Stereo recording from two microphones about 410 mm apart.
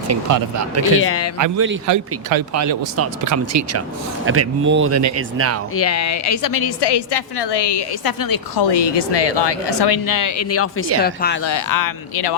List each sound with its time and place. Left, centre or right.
0.1 s speech: right
1.0 s speech: left
1.5 s a man's voice: right
1.9 s speech: right
5.7 s speech: left
6.5 s a woman's voice: left
11.0 s speech: left
11.4 s speech: left